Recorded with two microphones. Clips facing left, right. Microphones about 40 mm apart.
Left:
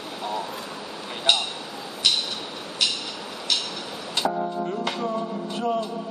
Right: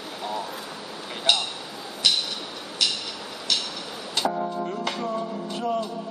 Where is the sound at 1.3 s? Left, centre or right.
Centre.